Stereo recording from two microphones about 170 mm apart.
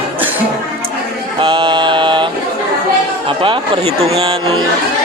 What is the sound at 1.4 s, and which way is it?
Mantra, 30° right (ahead or behind).